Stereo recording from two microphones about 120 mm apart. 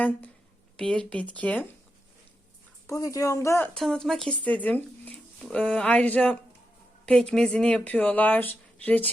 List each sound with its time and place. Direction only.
0.8 s speech: 10° left (ahead or behind)
2.8 s speech: 30° left (ahead or behind)
3.8 s speech: centre (ahead or behind)